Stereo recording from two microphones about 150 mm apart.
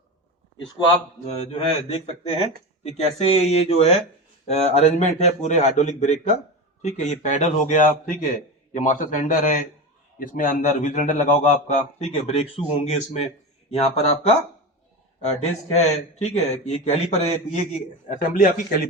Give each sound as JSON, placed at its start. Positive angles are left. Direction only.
{"t": 1.5, "sound": "a man's voice", "side_deg": 40}
{"t": 17.7, "sound": "a man's voice", "side_deg": 55}